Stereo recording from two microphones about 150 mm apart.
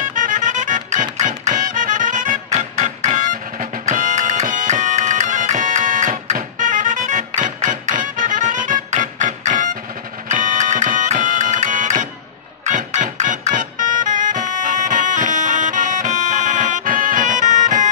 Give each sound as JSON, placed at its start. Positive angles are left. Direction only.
{"t": 0.1, "sound": "music", "side_deg": -60}
{"t": 3.2, "sound": "music", "side_deg": -60}